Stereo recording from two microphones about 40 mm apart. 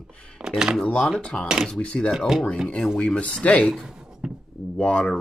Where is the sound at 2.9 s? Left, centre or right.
Left.